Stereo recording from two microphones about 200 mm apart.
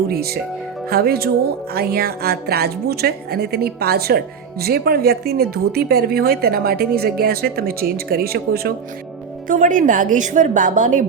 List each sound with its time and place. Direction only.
0.9 s a woman's voice: 50° right (ahead or behind)